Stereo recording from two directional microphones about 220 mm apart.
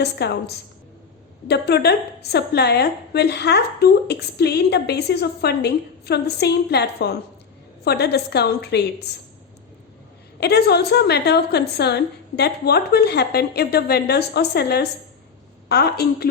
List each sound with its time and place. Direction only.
0.0 s a woman's voice: 50° left (ahead or behind)
10.4 s a woman's voice: 45° left (ahead or behind)